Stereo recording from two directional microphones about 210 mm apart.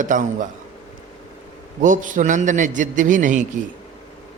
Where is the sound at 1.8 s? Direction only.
40° right (ahead or behind).